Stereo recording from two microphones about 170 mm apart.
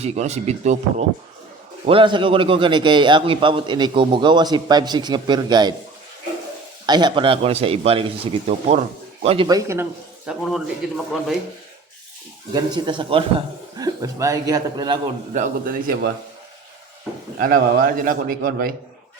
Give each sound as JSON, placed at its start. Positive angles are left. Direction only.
{"t": 0.0, "sound": "speech", "side_deg": -40}
{"t": 1.9, "sound": "a man's voice", "side_deg": -30}
{"t": 6.8, "sound": "speech", "side_deg": -25}
{"t": 9.5, "sound": "a man's voice", "side_deg": -20}
{"t": 10.2, "sound": "a man's voice", "side_deg": 0}
{"t": 12.5, "sound": "a man's voice", "side_deg": -25}
{"t": 15.3, "sound": "a man's voice", "side_deg": -45}
{"t": 17.4, "sound": "a man's voice", "side_deg": -60}